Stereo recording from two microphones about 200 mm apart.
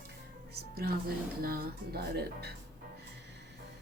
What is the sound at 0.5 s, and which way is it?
A woman's voice, 50° right (ahead or behind).